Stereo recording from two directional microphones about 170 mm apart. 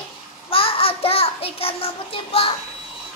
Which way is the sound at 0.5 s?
35° left (ahead or behind).